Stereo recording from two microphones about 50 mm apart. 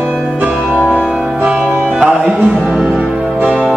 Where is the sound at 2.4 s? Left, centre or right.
Right.